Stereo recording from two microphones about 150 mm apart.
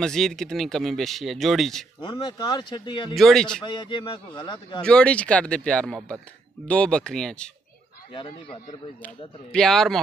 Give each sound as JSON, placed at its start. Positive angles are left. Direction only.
{"t": 0.0, "sound": "speech", "side_deg": 5}
{"t": 2.0, "sound": "speech", "side_deg": 30}
{"t": 3.2, "sound": "speech", "side_deg": 0}
{"t": 3.6, "sound": "a man's voice", "side_deg": 30}
{"t": 4.8, "sound": "speech", "side_deg": 5}
{"t": 8.1, "sound": "a man's voice", "side_deg": 35}
{"t": 9.0, "sound": "speech", "side_deg": 5}